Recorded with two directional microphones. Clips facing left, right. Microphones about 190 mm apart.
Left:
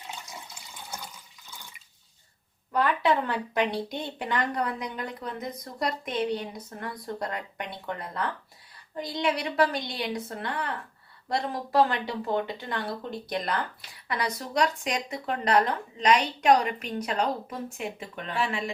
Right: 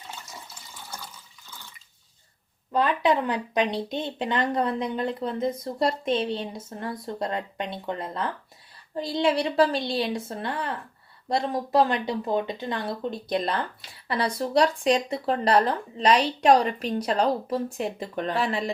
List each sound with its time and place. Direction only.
0.4 s water: 15° left (ahead or behind)
2.7 s speech: 20° right (ahead or behind); by 18.7 s 40° right (ahead or behind)